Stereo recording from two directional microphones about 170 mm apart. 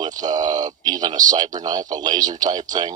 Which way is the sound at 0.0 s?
25° right (ahead or behind).